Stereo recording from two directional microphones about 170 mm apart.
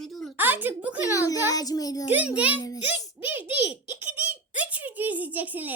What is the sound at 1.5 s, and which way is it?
Speech, 20° left (ahead or behind).